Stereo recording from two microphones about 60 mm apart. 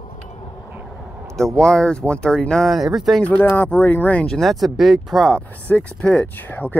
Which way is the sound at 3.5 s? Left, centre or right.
Left.